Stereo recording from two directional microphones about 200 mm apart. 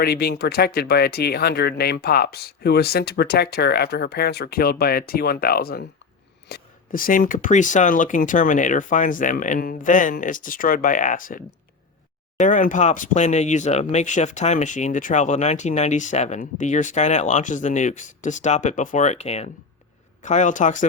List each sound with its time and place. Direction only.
0.0 s speech: 50° left (ahead or behind)